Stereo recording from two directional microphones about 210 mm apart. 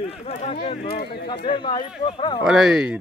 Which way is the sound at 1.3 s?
25° left (ahead or behind).